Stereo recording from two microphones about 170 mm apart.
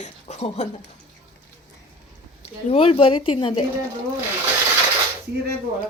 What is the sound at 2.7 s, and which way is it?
Speech, 35° left (ahead or behind).